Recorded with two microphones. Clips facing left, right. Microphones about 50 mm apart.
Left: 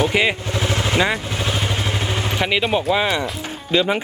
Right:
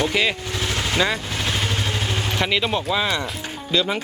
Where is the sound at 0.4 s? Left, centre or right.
Left.